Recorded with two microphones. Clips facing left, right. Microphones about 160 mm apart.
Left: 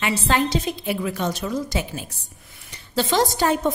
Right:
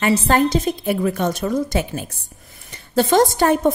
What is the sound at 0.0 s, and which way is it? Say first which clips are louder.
A woman's voice: right 5 dB; 45° right (ahead or behind).